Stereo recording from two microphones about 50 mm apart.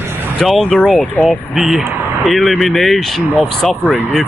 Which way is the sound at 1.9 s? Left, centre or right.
Right.